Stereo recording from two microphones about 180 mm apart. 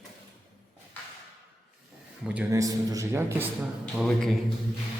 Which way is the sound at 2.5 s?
20° right (ahead or behind).